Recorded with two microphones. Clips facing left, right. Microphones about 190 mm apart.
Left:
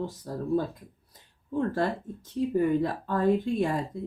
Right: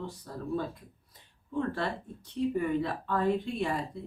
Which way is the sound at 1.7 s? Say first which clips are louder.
Left 5 dB; 40° left (ahead or behind).